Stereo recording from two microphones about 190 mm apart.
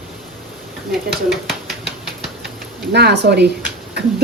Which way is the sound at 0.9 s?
Centre (ahead or behind).